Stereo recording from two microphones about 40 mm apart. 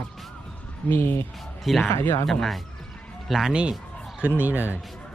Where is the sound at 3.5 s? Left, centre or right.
Right.